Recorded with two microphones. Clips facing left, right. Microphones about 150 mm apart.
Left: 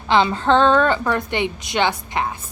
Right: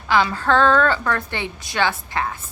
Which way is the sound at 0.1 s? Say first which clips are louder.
Left 2 dB; 25° left (ahead or behind).